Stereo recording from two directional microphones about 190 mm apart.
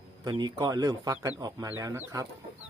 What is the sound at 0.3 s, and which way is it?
Speech, 20° right (ahead or behind).